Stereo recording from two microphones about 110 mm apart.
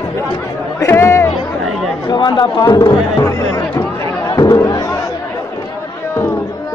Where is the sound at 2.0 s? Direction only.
40° left (ahead or behind).